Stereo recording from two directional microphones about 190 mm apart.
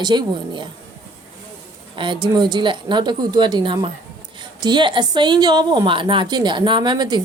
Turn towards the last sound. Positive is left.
turn(degrees=-25)  # may be behind; listen again after turning